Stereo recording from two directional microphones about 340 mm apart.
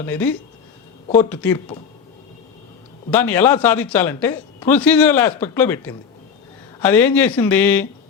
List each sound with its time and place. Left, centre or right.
0.0 s a man's voice: centre
1.3 s speech: centre
3.1 s a man's voice: centre